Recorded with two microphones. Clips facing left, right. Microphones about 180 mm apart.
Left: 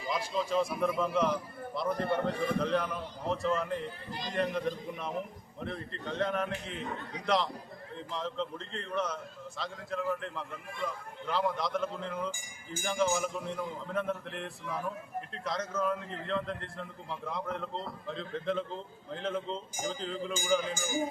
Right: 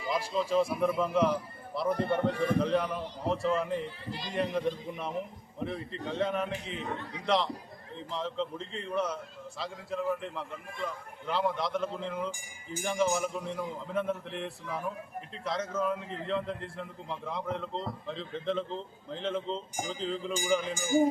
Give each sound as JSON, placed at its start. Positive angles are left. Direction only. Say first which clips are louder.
{"t": 0.3, "sound": "a man's voice", "louder": "right 3 dB", "side_deg": 0}
{"t": 4.1, "sound": "speech", "louder": "even", "side_deg": 45}
{"t": 4.4, "sound": "a man's voice", "louder": "right 1 dB", "side_deg": 0}